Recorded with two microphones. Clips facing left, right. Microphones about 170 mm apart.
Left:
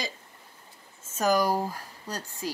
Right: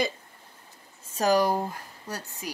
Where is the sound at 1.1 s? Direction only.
35° right (ahead or behind).